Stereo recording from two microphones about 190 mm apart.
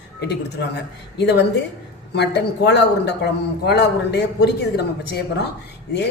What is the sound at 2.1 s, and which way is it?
Speech, 60° left (ahead or behind).